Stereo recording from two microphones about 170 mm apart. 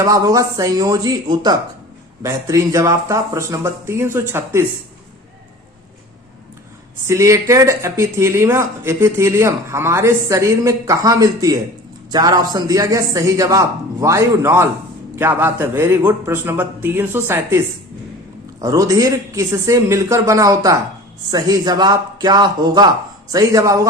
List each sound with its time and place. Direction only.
0.0 s a man's voice: 20° right (ahead or behind)
7.1 s a man's voice: 15° right (ahead or behind)
18.6 s a man's voice: 20° right (ahead or behind)